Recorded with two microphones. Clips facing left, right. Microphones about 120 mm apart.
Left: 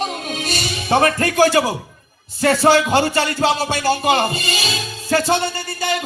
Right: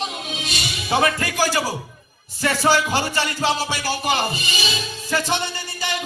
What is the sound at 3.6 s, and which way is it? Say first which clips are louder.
Speech: left 6 dB; 55° left (ahead or behind).